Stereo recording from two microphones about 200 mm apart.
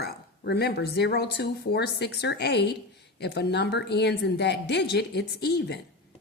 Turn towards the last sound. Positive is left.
turn(degrees=55)  # may be behind; listen again after turning